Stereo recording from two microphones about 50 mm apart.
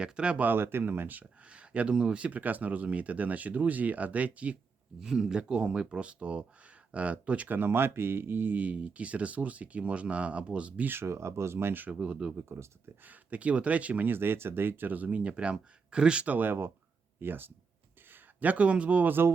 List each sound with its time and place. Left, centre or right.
0.0 s speech: right
0.4 s speech: right
1.2 s speech: right
4.9 s speech: centre; by 7.5 s right
7.5 s speech: right
10.8 s speech: right
11.1 s speech: right
11.9 s speech: right
12.4 s speech: right
13.1 s speech: right
14.1 s speech: right; by 16.2 s centre
16.2 s speech: right
16.5 s speech: right
18.3 s speech: right